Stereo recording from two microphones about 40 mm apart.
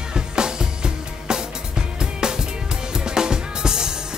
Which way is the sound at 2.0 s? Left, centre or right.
Centre.